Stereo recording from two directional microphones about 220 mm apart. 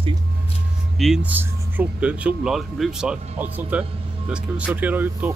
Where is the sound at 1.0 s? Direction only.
5° right (ahead or behind).